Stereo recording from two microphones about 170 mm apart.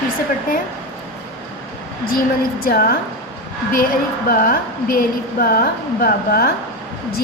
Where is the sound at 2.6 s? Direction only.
60° left (ahead or behind).